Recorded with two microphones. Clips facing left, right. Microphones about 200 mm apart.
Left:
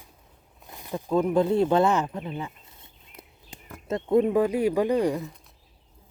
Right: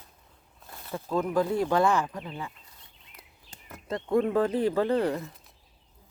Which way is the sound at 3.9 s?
20° left (ahead or behind).